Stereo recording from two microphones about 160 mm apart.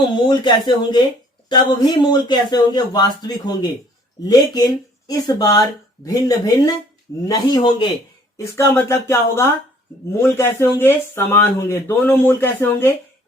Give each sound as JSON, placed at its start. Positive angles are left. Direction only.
{"t": 0.0, "sound": "speech", "side_deg": 25}